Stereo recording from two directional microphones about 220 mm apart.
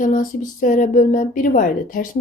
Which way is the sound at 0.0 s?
35° left (ahead or behind).